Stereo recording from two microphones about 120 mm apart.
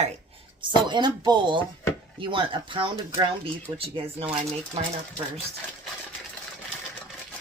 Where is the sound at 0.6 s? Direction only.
40° right (ahead or behind).